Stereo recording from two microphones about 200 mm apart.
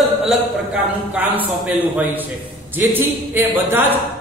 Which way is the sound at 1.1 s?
10° right (ahead or behind).